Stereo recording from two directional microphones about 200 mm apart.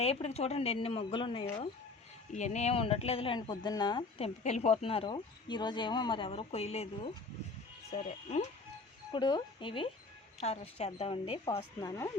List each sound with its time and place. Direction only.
0.0 s a woman's voice: 30° left (ahead or behind)
4.4 s a woman's voice: 35° left (ahead or behind)
9.1 s speech: 20° left (ahead or behind)